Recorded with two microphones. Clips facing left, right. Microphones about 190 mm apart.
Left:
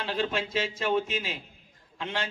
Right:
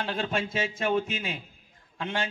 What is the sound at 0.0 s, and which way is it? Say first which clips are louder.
A man's voice: even; 50° right (ahead or behind).